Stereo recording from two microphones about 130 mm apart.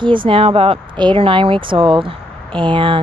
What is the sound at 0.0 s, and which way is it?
Speech, 40° right (ahead or behind).